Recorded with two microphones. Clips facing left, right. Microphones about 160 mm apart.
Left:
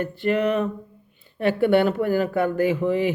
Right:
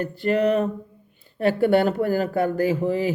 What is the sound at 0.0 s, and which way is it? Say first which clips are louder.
Speech: right 1 dB; 40° right (ahead or behind).